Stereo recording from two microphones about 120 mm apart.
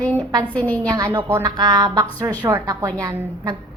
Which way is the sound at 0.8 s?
35° right (ahead or behind).